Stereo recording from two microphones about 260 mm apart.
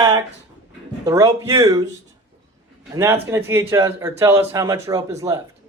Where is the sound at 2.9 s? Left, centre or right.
Centre.